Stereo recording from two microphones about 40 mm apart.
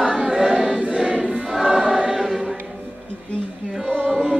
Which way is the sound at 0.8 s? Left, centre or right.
Right.